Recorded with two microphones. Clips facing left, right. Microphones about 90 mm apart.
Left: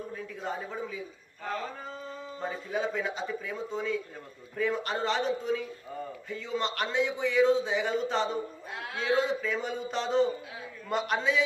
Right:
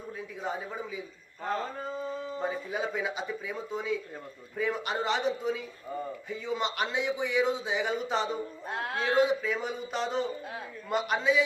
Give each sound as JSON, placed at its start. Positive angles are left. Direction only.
{"t": 0.4, "sound": "speech", "side_deg": -10}
{"t": 8.7, "sound": "a man's voice", "side_deg": -45}
{"t": 9.1, "sound": "speech", "side_deg": -5}